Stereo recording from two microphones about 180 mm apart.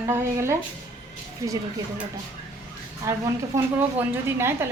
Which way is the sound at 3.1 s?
15° right (ahead or behind).